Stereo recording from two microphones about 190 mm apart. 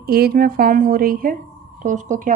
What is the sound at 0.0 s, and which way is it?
A woman's voice, 55° right (ahead or behind).